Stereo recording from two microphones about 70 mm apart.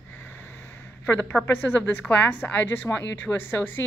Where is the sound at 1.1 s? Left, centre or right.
Left.